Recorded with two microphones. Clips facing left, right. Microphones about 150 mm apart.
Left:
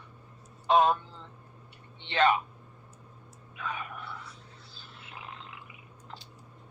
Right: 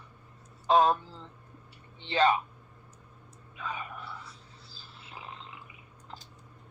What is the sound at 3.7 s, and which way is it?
Whispering, centre (ahead or behind).